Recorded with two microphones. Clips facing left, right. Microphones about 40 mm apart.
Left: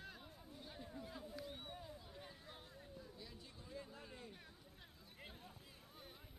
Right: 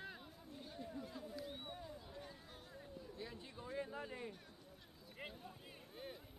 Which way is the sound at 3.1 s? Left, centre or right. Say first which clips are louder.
Right 6 dB; right.